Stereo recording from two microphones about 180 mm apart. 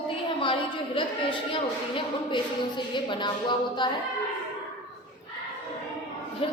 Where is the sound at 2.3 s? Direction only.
25° left (ahead or behind).